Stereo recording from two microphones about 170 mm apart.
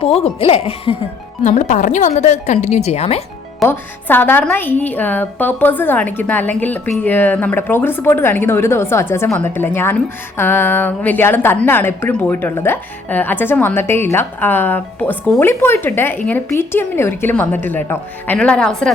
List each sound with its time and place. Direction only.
0.0 s speech: 35° left (ahead or behind)
1.5 s speech: 45° left (ahead or behind)
3.6 s a woman's voice: 10° left (ahead or behind)